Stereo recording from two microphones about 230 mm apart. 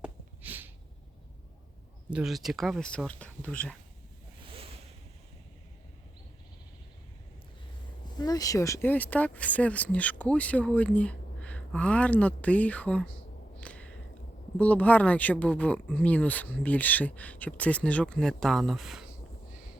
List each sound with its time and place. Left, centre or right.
0.0 s a sound: centre
2.0 s speech: centre
4.4 s ocean: right
8.2 s speech: centre
13.6 s a sound: centre
14.6 s speech: centre